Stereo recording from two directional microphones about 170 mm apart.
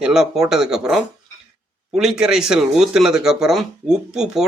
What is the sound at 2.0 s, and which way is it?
Speech, 5° right (ahead or behind).